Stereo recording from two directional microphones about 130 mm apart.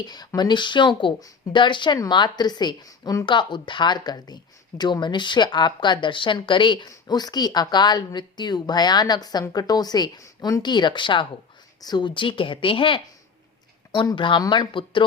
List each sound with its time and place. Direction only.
0.0 s a woman's voice: 30° left (ahead or behind)